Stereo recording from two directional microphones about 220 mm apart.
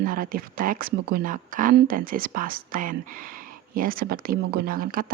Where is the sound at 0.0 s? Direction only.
40° right (ahead or behind).